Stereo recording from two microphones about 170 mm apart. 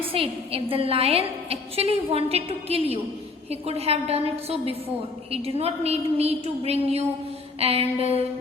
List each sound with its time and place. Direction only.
0.1 s a woman's voice: 35° right (ahead or behind)